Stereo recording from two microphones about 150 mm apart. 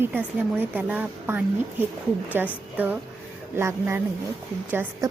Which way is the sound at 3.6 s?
15° right (ahead or behind).